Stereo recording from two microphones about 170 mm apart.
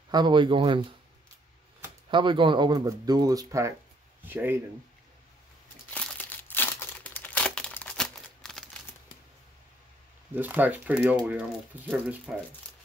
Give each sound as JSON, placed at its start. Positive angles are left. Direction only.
{"t": 0.1, "sound": "speech", "side_deg": -25}
{"t": 2.0, "sound": "speech", "side_deg": -30}
{"t": 5.9, "sound": "crumpling", "side_deg": 10}
{"t": 10.3, "sound": "speech", "side_deg": -10}